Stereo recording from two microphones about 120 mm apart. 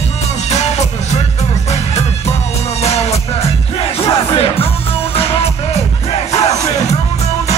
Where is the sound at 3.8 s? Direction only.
55° left (ahead or behind).